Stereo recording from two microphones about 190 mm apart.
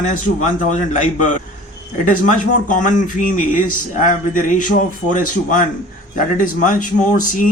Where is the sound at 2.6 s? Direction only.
45° left (ahead or behind).